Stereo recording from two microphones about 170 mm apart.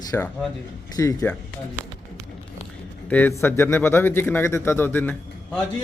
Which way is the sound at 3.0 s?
10° left (ahead or behind).